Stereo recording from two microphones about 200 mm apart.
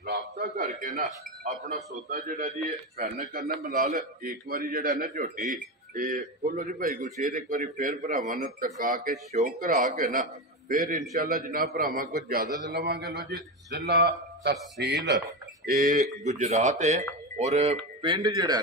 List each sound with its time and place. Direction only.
0.0 s music: 50° right (ahead or behind)
2.0 s a man's voice: 45° right (ahead or behind)
16.3 s speech: 35° right (ahead or behind)